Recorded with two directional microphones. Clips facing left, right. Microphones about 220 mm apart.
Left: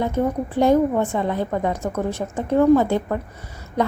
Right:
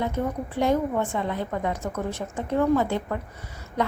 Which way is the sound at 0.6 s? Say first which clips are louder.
Left 6 dB; 40° left (ahead or behind).